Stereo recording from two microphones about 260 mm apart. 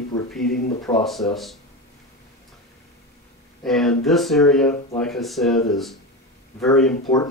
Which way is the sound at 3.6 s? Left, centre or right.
Centre.